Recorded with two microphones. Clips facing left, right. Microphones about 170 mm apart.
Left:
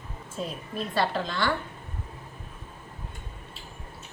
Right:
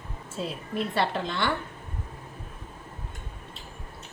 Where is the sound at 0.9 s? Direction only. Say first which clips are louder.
Left 2 dB; 25° right (ahead or behind).